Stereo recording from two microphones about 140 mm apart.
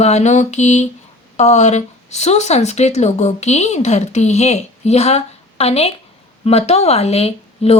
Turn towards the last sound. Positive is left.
turn(degrees=45)  # may be behind; listen again after turning